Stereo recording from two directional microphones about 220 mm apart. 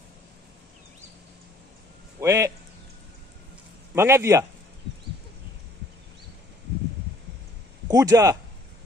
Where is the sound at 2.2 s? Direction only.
15° right (ahead or behind).